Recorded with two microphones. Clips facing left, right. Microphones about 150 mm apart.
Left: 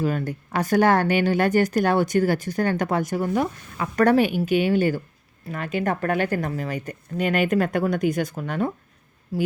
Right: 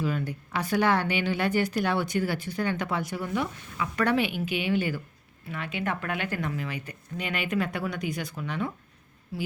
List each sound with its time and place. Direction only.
0.0 s speech: 45° left (ahead or behind)